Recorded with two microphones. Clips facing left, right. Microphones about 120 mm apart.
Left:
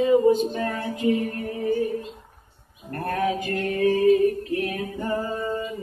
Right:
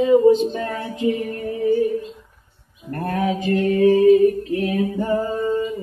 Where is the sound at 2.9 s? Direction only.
25° right (ahead or behind).